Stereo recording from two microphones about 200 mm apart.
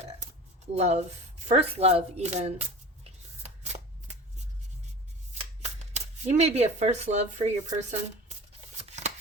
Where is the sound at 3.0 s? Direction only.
35° right (ahead or behind).